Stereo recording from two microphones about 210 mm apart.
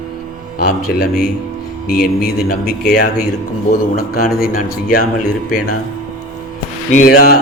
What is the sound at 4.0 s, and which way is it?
Speech, 45° left (ahead or behind).